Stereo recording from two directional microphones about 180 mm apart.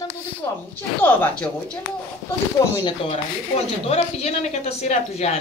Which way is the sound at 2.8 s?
25° left (ahead or behind).